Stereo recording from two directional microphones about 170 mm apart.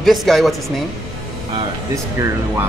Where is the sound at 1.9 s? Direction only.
15° right (ahead or behind).